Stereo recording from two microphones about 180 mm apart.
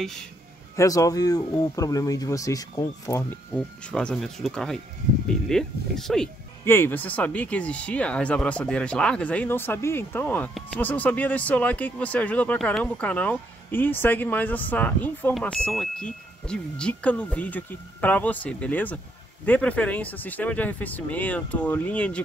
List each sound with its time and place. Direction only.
0.7 s speech: 20° left (ahead or behind)
3.9 s speech: 5° left (ahead or behind)
6.6 s speech: 10° left (ahead or behind)